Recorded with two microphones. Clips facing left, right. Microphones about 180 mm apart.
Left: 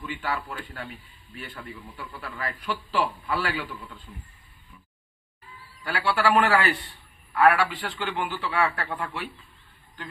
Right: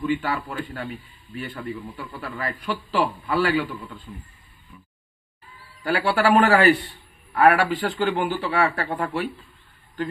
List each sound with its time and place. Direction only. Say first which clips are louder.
0.0 s a man's voice: right 7 dB; 45° right (ahead or behind)
2.2 s a man's voice: right 3 dB; 50° right (ahead or behind)
5.9 s a man's voice: right 5 dB; 45° right (ahead or behind)